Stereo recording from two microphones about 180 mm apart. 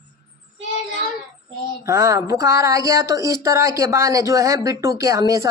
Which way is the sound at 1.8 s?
15° right (ahead or behind).